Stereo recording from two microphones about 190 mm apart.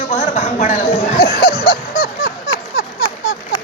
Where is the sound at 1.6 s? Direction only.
55° left (ahead or behind).